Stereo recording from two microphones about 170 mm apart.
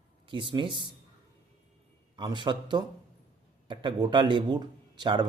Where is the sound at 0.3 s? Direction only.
30° right (ahead or behind).